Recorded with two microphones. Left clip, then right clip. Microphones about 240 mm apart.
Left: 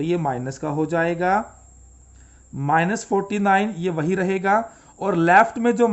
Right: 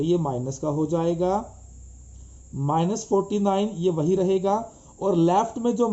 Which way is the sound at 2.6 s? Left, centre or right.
Left.